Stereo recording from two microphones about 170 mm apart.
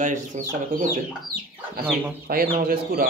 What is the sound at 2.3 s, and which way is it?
Speech, 60° right (ahead or behind).